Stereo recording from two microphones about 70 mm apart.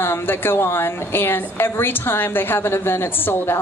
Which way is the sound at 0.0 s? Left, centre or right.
Left.